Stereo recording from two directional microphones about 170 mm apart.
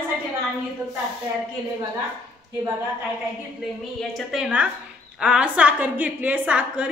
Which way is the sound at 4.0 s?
Centre (ahead or behind).